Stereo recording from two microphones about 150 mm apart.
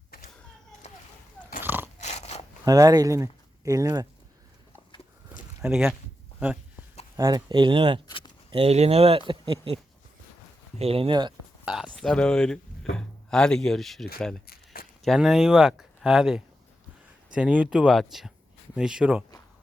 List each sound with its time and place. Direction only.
1.6 s dog: 15° right (ahead or behind)
2.0 s a sound: 50° left (ahead or behind)
2.6 s speech: 25° right (ahead or behind)
5.6 s speech: 5° right (ahead or behind)
7.2 s speech: 25° right (ahead or behind)
8.0 s a sound: 30° left (ahead or behind)
8.4 s speech: 40° right (ahead or behind)
11.6 s speech: 5° right (ahead or behind)
14.4 s a sound: 85° left
15.0 s speech: centre (ahead or behind)